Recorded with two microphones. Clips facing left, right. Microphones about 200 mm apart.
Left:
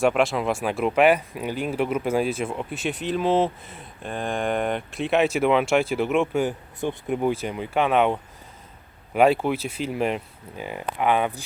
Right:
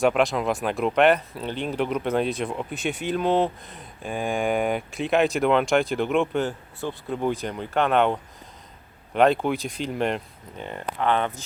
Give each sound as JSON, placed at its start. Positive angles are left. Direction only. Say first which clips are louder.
{"t": 0.0, "sound": "speech", "louder": "even", "side_deg": 0}
{"t": 6.8, "sound": "speech", "louder": "left 2 dB", "side_deg": 15}